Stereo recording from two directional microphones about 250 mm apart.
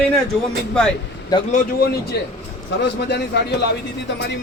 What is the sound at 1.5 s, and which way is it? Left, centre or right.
A man's voice, left.